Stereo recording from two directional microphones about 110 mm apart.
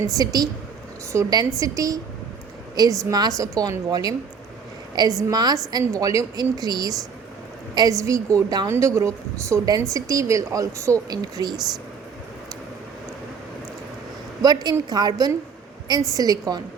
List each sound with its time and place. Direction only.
0.0 s a woman's voice: 35° right (ahead or behind)
14.4 s a woman's voice: 40° right (ahead or behind)